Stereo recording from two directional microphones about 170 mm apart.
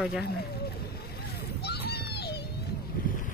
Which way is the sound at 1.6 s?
70° left (ahead or behind).